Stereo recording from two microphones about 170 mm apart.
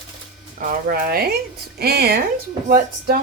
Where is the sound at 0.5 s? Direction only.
60° right (ahead or behind).